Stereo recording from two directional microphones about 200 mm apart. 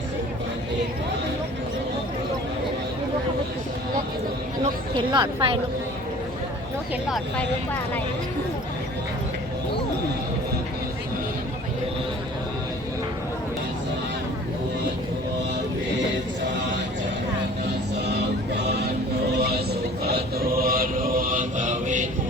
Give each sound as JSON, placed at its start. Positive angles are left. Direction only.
{"t": 4.6, "sound": "speech", "side_deg": -25}
{"t": 18.0, "sound": "music", "side_deg": -55}
{"t": 19.4, "sound": "a sound", "side_deg": -55}
{"t": 20.1, "sound": "chant", "side_deg": -50}